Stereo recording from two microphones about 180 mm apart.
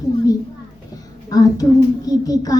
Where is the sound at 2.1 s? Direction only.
20° left (ahead or behind).